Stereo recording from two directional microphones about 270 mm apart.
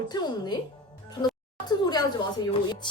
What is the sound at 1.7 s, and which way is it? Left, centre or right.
Speech, centre.